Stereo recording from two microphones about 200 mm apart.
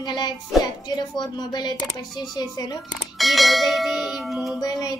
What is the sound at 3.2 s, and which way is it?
Bell, centre (ahead or behind).